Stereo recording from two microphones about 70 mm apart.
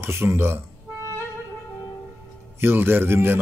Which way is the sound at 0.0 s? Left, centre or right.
Right.